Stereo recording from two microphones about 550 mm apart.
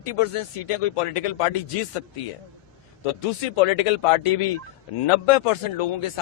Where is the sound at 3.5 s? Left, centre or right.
Left.